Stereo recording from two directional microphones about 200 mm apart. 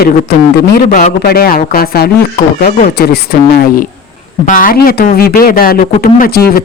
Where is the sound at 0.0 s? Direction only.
50° left (ahead or behind).